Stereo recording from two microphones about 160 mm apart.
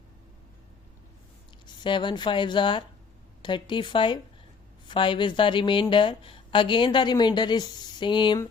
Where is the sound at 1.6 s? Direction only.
30° left (ahead or behind).